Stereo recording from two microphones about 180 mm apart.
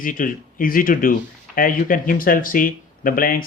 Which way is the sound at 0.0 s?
50° left (ahead or behind).